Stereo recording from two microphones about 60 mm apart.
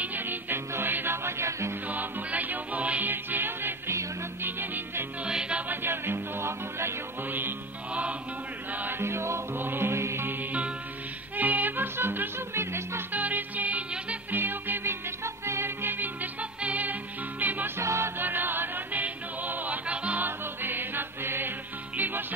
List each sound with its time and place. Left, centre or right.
0.0 s music: right
1.9 s music: right
4.4 s salsa music: right
5.2 s music: centre
5.7 s music: right
7.2 s music: right
9.0 s music: right
11.3 s music: right
13.1 s music: right
17.7 s music: right
18.2 s music: right
20.2 s music: right